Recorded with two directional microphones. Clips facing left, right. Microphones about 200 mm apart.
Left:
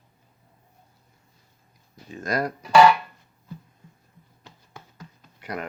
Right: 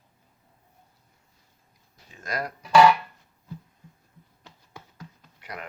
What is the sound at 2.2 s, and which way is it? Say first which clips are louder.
Speech: left 6 dB; 40° left (ahead or behind).